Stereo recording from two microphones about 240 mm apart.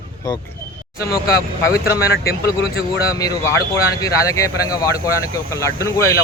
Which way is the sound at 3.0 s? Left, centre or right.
Centre.